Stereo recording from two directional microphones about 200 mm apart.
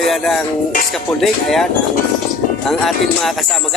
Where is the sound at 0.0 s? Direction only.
Centre (ahead or behind).